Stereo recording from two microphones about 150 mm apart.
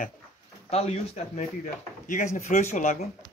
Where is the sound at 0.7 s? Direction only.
45° left (ahead or behind).